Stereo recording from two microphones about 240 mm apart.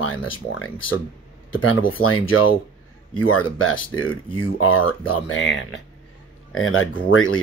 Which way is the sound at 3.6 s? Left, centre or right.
Left.